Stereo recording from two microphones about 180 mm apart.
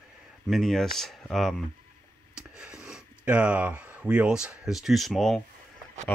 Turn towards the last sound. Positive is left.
turn(degrees=0)  # may be behind; listen again after turning